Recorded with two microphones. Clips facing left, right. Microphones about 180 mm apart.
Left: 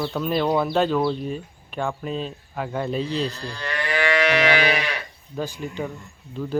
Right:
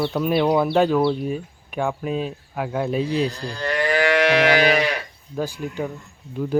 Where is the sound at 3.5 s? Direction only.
40° right (ahead or behind).